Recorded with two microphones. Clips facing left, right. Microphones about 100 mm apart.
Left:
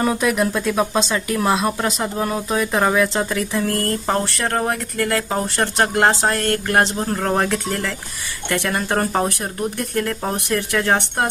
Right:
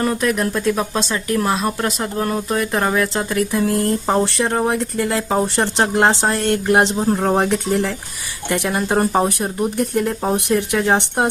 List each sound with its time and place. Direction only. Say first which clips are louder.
0.0 s speech: even; 5° left (ahead or behind); by 11.3 s 15° right (ahead or behind)